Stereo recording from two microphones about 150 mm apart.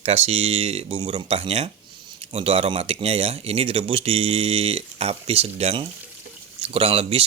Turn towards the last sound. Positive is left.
turn(degrees=-40)  # may be behind; listen again after turning